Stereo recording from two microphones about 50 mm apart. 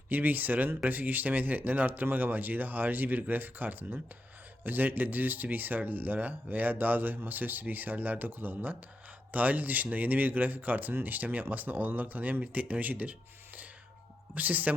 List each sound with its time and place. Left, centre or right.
0.1 s speech: right